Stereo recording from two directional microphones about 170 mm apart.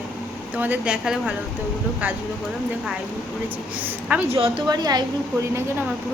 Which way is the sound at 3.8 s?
5° right (ahead or behind).